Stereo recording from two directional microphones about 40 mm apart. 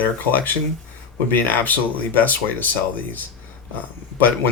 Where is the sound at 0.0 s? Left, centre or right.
Left.